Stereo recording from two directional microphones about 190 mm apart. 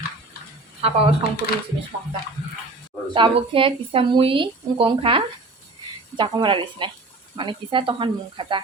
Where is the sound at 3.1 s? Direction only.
25° right (ahead or behind).